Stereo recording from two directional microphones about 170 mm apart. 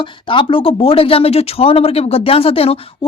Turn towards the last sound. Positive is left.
turn(degrees=35)  # may be behind; listen again after turning